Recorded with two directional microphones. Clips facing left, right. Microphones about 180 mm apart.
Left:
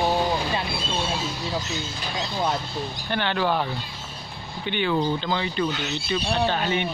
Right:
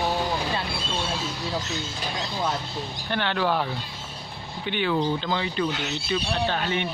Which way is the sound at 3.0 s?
Centre (ahead or behind).